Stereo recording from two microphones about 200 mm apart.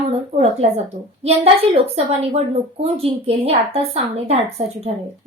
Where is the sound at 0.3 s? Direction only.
35° right (ahead or behind).